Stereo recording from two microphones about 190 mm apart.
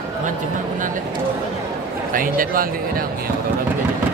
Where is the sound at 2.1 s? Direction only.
45° right (ahead or behind).